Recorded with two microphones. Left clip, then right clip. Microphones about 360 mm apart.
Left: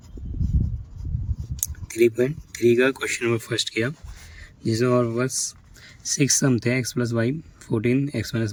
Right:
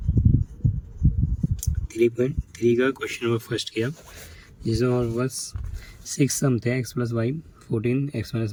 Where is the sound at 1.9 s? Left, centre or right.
Centre.